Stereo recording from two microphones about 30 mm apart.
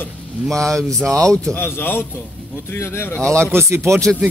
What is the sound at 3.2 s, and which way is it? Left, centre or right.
Speech, left.